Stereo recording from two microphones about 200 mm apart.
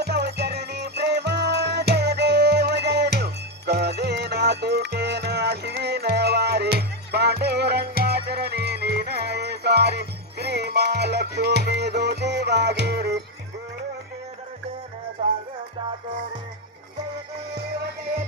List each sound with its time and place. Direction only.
0.0 s music: 55° right (ahead or behind)
15.2 s music: 30° right (ahead or behind)